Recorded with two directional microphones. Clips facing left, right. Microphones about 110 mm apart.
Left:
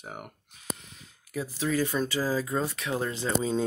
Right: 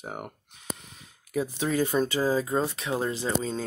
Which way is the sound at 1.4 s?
25° right (ahead or behind).